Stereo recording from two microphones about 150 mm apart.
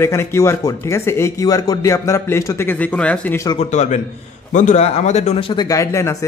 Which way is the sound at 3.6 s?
50° left (ahead or behind).